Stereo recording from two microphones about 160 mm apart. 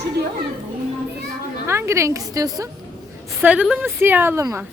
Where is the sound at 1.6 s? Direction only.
15° right (ahead or behind).